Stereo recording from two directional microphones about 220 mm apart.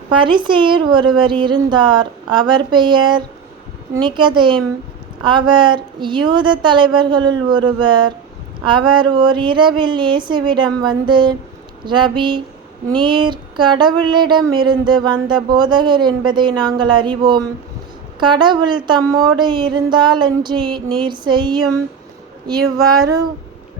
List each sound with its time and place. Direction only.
0.1 s speech: 20° right (ahead or behind)